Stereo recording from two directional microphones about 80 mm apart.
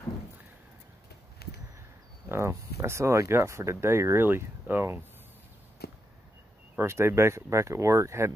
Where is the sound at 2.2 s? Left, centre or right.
Right.